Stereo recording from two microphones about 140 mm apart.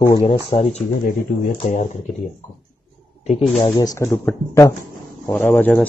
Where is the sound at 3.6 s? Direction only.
25° left (ahead or behind).